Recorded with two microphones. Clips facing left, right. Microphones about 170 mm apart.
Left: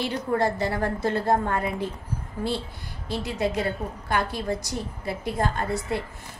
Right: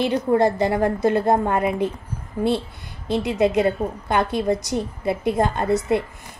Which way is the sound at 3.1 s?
20° right (ahead or behind).